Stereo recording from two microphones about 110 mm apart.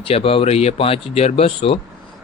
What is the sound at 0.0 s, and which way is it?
Speech, 60° left (ahead or behind).